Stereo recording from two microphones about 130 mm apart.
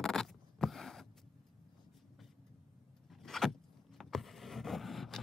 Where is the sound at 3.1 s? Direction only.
5° left (ahead or behind).